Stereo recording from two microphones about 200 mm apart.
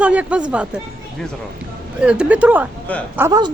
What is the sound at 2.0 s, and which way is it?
Speech, 5° right (ahead or behind).